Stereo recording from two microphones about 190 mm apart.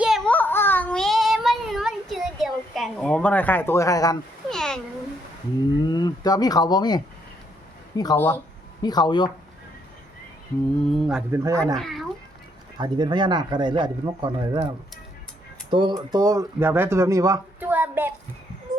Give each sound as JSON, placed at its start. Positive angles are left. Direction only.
{"t": 0.3, "sound": "child singing", "side_deg": 10}
{"t": 4.4, "sound": "a sound", "side_deg": 5}
{"t": 5.8, "sound": "speech", "side_deg": 20}
{"t": 10.8, "sound": "speech", "side_deg": 0}
{"t": 11.3, "sound": "speech", "side_deg": -15}
{"t": 11.8, "sound": "cat", "side_deg": 0}
{"t": 12.8, "sound": "speech", "side_deg": -25}
{"t": 15.7, "sound": "speech", "side_deg": -25}